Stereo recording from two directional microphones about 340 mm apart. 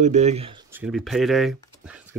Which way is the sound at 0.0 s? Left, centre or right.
Centre.